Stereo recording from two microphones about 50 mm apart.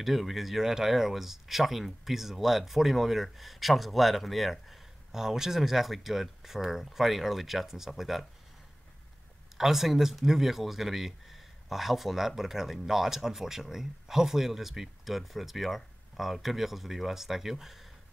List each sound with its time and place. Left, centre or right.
0.0 s speech: centre
9.6 s speech: centre